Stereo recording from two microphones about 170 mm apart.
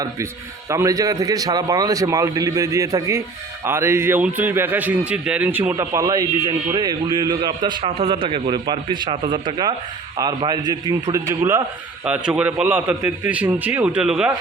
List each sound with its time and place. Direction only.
0.7 s a man's voice: 20° right (ahead or behind)
12.0 s a man's voice: 5° right (ahead or behind)